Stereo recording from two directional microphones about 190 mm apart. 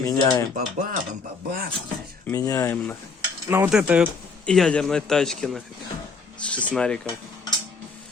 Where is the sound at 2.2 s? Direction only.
15° left (ahead or behind).